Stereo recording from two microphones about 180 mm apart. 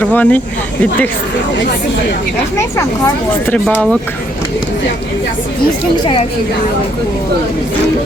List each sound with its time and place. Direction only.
0.0 s speech: 10° left (ahead or behind)
2.6 s speech: 15° left (ahead or behind)